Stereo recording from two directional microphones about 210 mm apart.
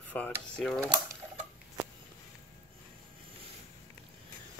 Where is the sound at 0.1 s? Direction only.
5° left (ahead or behind).